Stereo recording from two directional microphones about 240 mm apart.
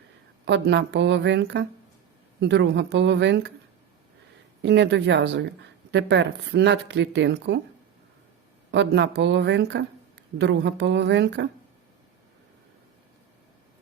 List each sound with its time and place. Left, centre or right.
0.4 s speech: right
4.6 s speech: right
8.7 s speech: right